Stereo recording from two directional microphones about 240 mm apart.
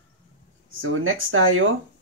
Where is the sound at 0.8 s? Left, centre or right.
Right.